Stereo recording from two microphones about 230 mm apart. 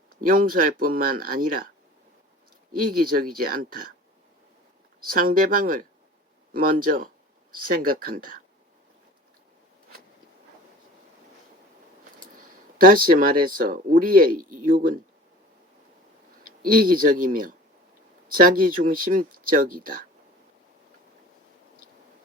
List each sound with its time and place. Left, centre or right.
0.2 s speech: right
2.7 s speech: right
5.0 s speech: right
12.2 s speech: right
16.4 s speech: right